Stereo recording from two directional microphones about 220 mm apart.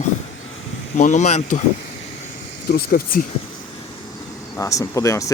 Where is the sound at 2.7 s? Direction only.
40° left (ahead or behind).